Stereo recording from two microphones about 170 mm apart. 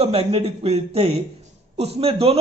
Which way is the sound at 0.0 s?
35° right (ahead or behind).